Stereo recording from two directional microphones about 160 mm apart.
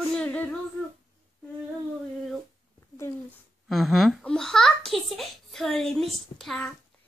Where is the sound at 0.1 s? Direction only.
10° left (ahead or behind).